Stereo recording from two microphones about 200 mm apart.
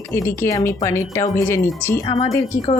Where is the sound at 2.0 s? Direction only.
25° left (ahead or behind).